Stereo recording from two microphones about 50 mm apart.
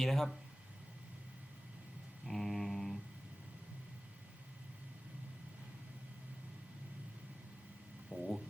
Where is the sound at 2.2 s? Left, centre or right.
Centre.